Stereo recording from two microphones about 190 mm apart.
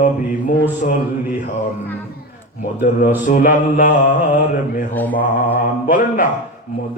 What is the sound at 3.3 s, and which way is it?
Mantra, 40° left (ahead or behind).